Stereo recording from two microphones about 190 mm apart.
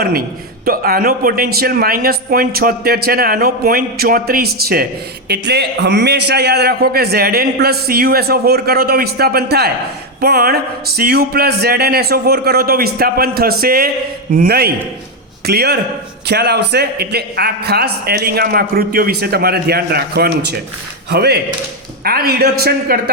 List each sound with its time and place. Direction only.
0.0 s a man's voice: 50° right (ahead or behind)